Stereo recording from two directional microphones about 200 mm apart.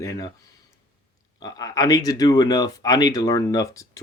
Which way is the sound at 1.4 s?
20° left (ahead or behind).